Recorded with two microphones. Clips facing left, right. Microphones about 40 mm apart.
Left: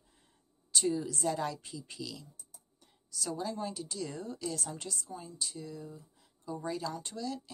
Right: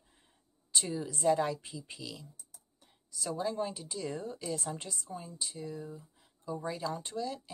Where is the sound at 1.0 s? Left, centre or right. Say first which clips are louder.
Right 4 dB; centre.